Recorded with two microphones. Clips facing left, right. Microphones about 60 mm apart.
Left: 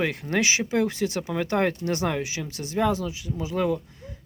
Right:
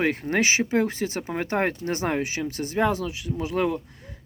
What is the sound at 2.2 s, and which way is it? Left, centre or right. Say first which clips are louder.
Speech: right 3 dB; right.